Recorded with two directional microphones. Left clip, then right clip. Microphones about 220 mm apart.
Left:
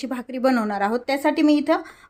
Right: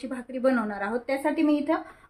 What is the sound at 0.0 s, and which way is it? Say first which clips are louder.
A woman's voice: left 4 dB; 40° left (ahead or behind).